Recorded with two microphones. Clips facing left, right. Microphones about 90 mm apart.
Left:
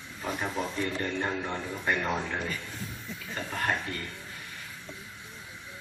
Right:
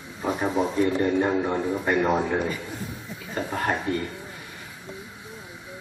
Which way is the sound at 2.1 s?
35° right (ahead or behind).